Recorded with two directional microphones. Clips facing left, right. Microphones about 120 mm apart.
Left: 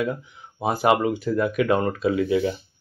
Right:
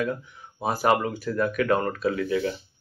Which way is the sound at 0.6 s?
20° left (ahead or behind).